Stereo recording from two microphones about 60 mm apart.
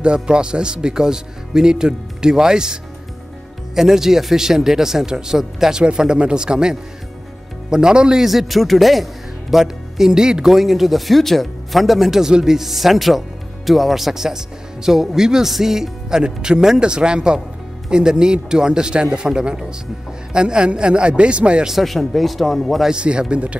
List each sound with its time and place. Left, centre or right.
0.0 s a man's voice: centre
21.7 s a man's voice: centre
22.9 s speech: centre